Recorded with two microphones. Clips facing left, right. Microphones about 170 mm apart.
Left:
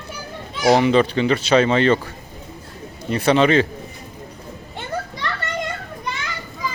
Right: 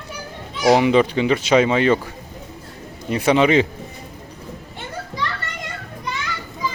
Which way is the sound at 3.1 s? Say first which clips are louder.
Even; 15° right (ahead or behind).